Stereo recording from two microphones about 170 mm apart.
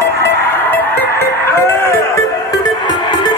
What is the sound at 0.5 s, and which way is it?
Music, 10° left (ahead or behind).